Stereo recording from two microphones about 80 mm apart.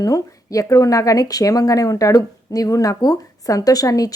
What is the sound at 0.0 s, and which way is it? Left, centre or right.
Speech, left.